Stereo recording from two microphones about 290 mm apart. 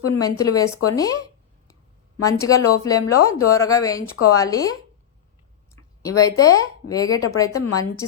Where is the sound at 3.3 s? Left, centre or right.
Centre.